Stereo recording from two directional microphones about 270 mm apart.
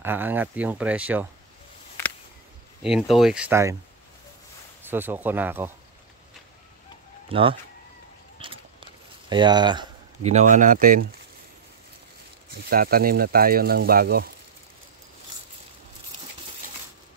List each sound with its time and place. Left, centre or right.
0.0 s speech: centre
2.8 s speech: centre
4.8 s speech: centre
7.2 s speech: centre
8.4 s a sound: centre
9.3 s speech: centre; by 11.1 s right
12.5 s speech: right